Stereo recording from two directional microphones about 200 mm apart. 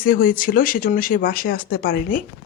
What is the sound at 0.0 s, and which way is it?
Speech, 45° left (ahead or behind).